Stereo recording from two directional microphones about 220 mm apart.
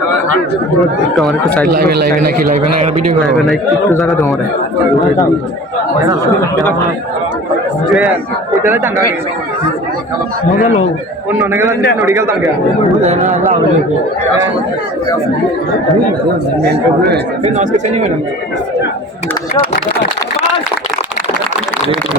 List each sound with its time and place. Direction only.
0.8 s speech: centre (ahead or behind)
1.6 s a man's voice: 40° right (ahead or behind)
3.3 s speech: centre (ahead or behind)
7.9 s a man's voice: 5° right (ahead or behind)
11.3 s a man's voice: 10° right (ahead or behind)
17.4 s speech: 30° right (ahead or behind)